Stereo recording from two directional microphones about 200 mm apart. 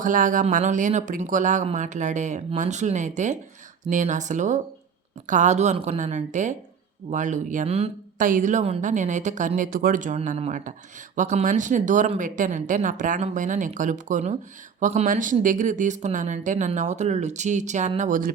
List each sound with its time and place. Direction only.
0.0 s speech: 40° right (ahead or behind)